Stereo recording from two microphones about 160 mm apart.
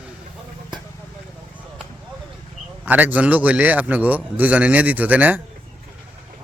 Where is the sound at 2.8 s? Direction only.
10° right (ahead or behind).